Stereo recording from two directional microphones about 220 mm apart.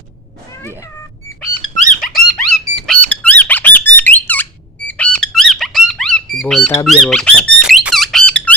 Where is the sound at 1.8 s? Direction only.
35° left (ahead or behind).